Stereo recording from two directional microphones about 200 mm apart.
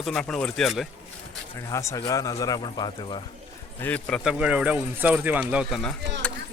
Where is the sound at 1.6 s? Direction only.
15° left (ahead or behind).